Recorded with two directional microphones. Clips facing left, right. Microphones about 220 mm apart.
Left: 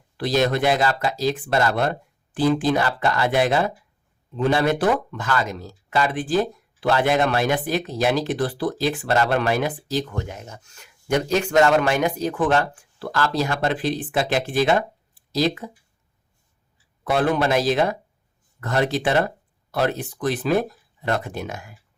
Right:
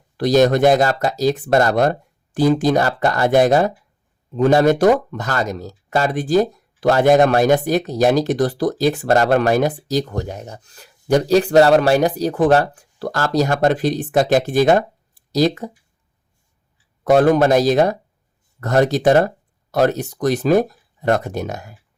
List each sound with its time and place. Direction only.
0.2 s speech: 45° right (ahead or behind)
17.0 s speech: 45° right (ahead or behind)